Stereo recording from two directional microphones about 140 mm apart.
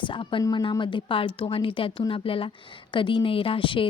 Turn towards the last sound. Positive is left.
turn(degrees=40)  # may be behind; listen again after turning